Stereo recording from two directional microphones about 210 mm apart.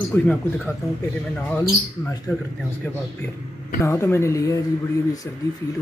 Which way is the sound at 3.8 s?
10° left (ahead or behind).